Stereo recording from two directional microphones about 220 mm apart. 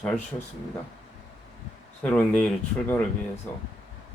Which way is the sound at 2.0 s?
5° left (ahead or behind).